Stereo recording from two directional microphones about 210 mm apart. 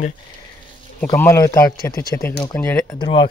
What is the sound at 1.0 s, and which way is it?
Speech, 10° left (ahead or behind).